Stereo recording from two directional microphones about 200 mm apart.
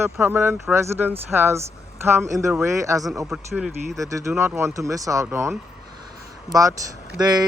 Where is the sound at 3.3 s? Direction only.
5° right (ahead or behind).